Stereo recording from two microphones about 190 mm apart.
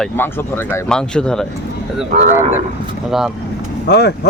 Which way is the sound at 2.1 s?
40° right (ahead or behind).